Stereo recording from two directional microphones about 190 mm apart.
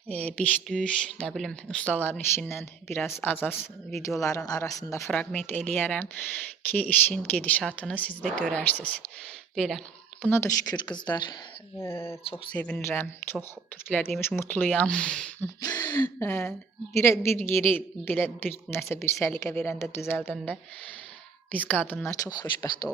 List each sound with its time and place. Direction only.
0.1 s speech: 5° left (ahead or behind)
10.2 s a woman's voice: 15° left (ahead or behind)
15.6 s a woman's voice: 15° left (ahead or behind)